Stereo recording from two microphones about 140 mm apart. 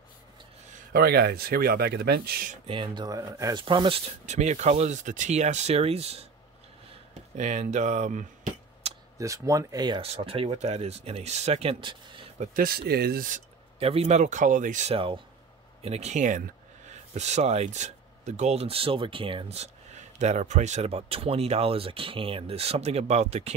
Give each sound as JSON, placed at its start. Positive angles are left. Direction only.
{"t": 0.9, "sound": "speech", "side_deg": -90}
{"t": 2.3, "sound": "speech", "side_deg": -75}
{"t": 2.6, "sound": "speech", "side_deg": -35}
{"t": 3.5, "sound": "speech", "side_deg": -35}
{"t": 4.3, "sound": "speech", "side_deg": -55}
{"t": 7.3, "sound": "speech", "side_deg": -55}
{"t": 8.8, "sound": "a sound", "side_deg": -50}
{"t": 9.2, "sound": "speech", "side_deg": -25}
{"t": 10.0, "sound": "speech", "side_deg": -45}
{"t": 12.4, "sound": "speech", "side_deg": -85}
{"t": 13.7, "sound": "speech", "side_deg": -45}
{"t": 15.8, "sound": "speech", "side_deg": -50}
{"t": 17.1, "sound": "speech", "side_deg": -50}
{"t": 20.2, "sound": "speech", "side_deg": -55}